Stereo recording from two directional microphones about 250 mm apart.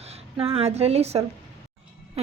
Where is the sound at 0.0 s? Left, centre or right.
Right.